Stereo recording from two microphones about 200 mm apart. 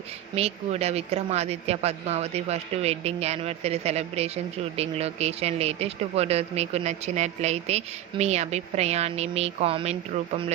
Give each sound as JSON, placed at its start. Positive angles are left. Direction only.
{"t": 0.3, "sound": "speech", "side_deg": -30}